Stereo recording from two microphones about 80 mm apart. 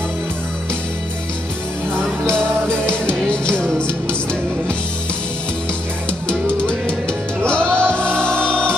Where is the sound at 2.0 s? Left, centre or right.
Centre.